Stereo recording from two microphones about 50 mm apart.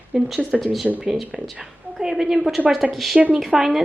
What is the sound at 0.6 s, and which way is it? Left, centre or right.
A woman's voice, centre.